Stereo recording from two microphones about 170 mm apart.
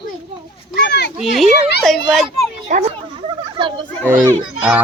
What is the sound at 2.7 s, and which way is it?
Speech, 50° right (ahead or behind).